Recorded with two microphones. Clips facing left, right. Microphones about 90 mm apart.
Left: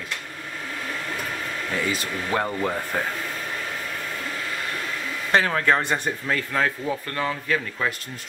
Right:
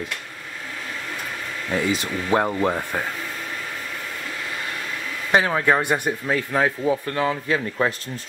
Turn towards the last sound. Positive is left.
turn(degrees=-20)  # may be behind; listen again after turning